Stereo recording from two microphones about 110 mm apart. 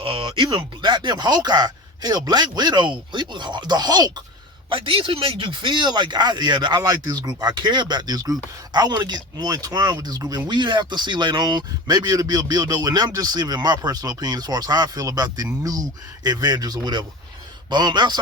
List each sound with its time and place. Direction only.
0.0 s speech: 55° right (ahead or behind); by 4.1 s 40° right (ahead or behind)
4.7 s speech: 55° right (ahead or behind)